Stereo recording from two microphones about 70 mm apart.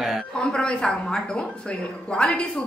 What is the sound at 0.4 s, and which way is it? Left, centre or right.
A woman's voice, centre.